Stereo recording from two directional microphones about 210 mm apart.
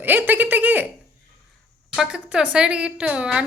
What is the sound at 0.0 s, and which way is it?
Speech, 10° right (ahead or behind).